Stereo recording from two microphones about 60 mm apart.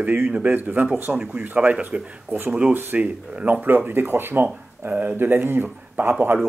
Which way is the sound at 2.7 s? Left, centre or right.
Right.